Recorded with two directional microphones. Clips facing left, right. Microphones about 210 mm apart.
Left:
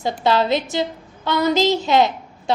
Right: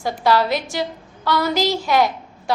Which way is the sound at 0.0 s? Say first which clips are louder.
Even; 20° left (ahead or behind).